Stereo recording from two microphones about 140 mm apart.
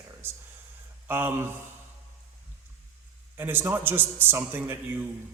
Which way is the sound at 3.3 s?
15° right (ahead or behind).